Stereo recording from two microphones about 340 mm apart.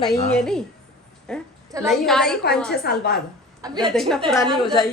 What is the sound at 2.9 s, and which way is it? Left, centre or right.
Speech, left.